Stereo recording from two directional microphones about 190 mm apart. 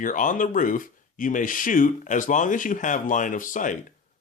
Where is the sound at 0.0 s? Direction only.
45° left (ahead or behind).